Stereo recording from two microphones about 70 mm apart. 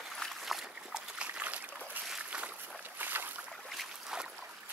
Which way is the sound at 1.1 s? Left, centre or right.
Centre.